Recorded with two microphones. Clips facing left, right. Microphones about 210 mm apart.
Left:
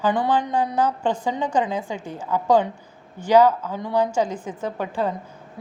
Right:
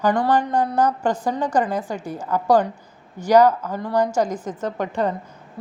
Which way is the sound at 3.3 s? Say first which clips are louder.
Right 1 dB; 15° right (ahead or behind).